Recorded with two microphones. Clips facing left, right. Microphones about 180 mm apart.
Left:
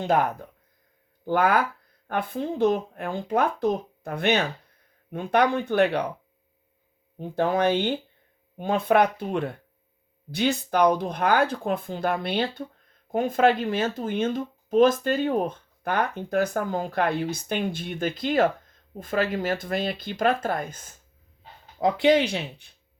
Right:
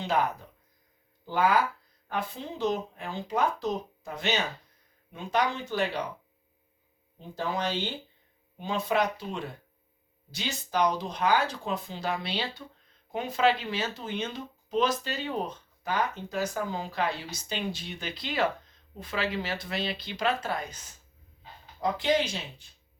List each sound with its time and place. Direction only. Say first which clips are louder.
0.0 s speech: left 5 dB; 50° left (ahead or behind)
7.2 s speech: left 9 dB; 55° left (ahead or behind)
21.8 s speech: left 7 dB; 65° left (ahead or behind)